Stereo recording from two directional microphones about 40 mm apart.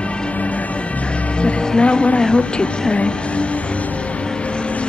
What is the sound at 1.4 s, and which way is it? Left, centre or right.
Speech, left.